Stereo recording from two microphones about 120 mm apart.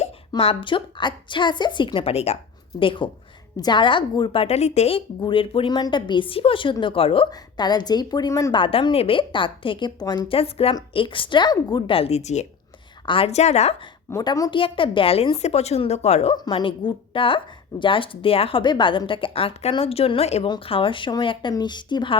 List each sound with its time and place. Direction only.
0.3 s a woman's voice: 50° left (ahead or behind)
2.7 s a woman's voice: 45° left (ahead or behind)
4.4 s a woman's voice: 65° left (ahead or behind)
7.3 s a woman's voice: 35° left (ahead or behind)
8.5 s a woman's voice: 45° left (ahead or behind)
10.2 s a woman's voice: 55° left (ahead or behind); by 11.9 s 35° left (ahead or behind)
11.9 s speech: 60° left (ahead or behind)
13.1 s a woman's voice: 50° left (ahead or behind)
14.3 s a woman's voice: 30° left (ahead or behind)
14.5 s a woman's voice: 45° left (ahead or behind)
15.4 s a woman's voice: 65° left (ahead or behind)
16.3 s a woman's voice: 40° left (ahead or behind)